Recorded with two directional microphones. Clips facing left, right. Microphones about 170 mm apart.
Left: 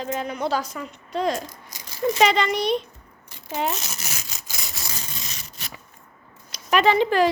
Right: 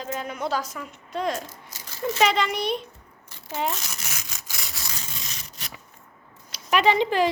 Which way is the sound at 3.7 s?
25° left (ahead or behind).